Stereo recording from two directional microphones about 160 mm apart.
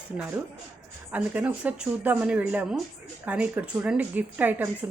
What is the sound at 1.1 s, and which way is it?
A woman's voice, 10° right (ahead or behind).